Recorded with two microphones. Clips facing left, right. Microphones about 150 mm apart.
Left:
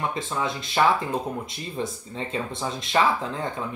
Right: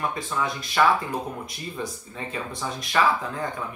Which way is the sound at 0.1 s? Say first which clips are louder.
Even; 25° left (ahead or behind).